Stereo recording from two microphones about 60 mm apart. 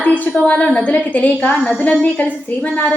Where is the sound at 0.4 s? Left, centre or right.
Left.